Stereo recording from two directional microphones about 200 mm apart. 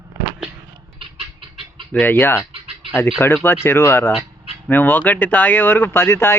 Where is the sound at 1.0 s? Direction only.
25° right (ahead or behind).